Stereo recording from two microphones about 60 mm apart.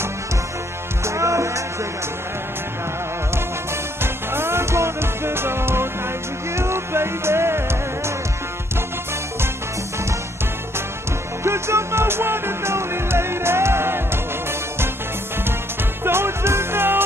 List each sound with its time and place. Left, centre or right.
1.0 s music: right
4.0 s music: right
11.4 s music: right
16.0 s music: right